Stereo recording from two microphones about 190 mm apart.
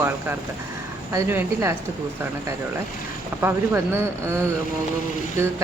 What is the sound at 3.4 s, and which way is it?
A man's voice, 10° right (ahead or behind).